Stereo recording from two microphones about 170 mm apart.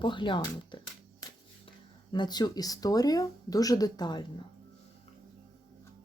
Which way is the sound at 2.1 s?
25° left (ahead or behind).